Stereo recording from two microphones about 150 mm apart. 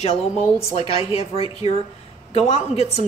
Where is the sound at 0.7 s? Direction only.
40° left (ahead or behind).